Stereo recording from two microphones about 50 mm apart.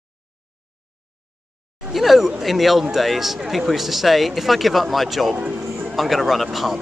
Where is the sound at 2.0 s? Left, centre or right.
Centre.